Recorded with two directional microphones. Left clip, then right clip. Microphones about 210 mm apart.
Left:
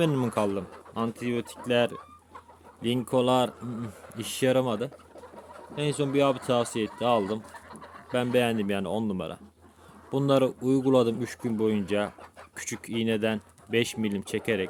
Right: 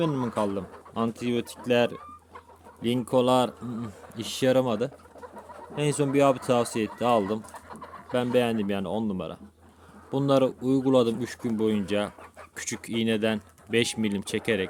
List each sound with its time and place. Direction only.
0.0 s speech: 20° left (ahead or behind)
0.9 s speech: centre (ahead or behind)